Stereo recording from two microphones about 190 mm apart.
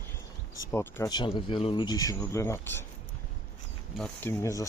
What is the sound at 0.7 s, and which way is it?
Speech, 20° left (ahead or behind).